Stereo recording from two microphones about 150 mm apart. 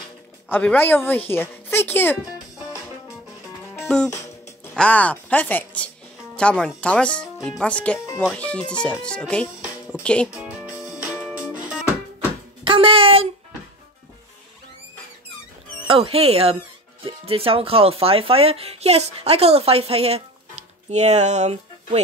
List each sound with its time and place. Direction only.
0.5 s speech: 10° left (ahead or behind)
3.8 s music: 5° left (ahead or behind)
4.7 s speech: 10° left (ahead or behind)
10.3 s music: 5° right (ahead or behind)
12.6 s a sound: 35° right (ahead or behind)
15.9 s speech: 40° right (ahead or behind)